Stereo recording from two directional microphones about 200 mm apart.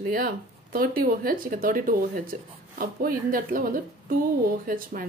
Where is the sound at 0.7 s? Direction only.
45° right (ahead or behind).